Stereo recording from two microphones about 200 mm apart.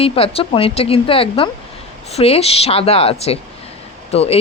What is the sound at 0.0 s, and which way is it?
Speech, 30° left (ahead or behind).